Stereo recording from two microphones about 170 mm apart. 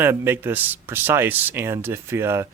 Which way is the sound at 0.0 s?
15° right (ahead or behind).